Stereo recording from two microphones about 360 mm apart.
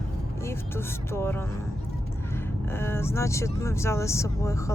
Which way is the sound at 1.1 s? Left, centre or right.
Centre.